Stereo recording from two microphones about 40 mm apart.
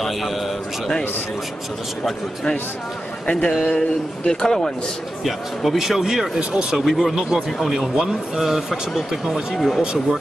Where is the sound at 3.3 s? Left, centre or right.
Left.